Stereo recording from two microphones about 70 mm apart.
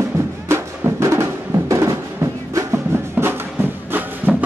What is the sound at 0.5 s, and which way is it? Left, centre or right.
Music, right.